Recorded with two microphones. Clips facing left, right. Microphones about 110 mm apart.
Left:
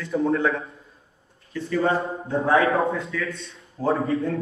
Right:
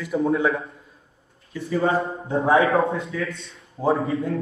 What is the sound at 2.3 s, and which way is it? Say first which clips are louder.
Speech: right 2 dB; 25° right (ahead or behind).